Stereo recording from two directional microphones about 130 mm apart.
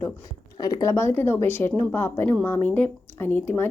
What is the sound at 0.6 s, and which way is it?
A woman's voice, 30° left (ahead or behind).